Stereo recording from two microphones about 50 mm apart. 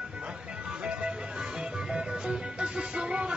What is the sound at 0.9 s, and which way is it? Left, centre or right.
Music, right.